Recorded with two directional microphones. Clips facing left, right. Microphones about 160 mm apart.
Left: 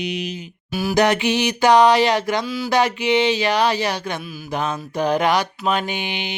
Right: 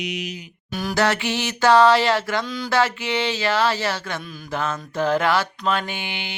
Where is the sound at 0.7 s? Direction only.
10° left (ahead or behind).